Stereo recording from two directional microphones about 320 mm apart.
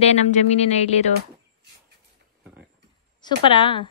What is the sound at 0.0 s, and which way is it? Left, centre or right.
Speech, centre.